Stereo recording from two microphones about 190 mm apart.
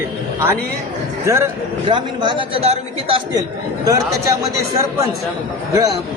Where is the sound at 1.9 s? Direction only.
25° right (ahead or behind).